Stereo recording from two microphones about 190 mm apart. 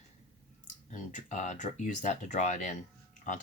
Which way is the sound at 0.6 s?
40° left (ahead or behind).